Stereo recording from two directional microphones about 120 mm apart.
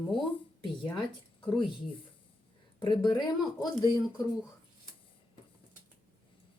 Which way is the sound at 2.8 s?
40° left (ahead or behind).